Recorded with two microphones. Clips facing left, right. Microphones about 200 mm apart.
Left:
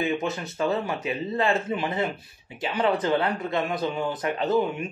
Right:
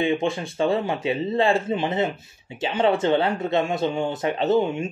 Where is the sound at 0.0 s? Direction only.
25° right (ahead or behind).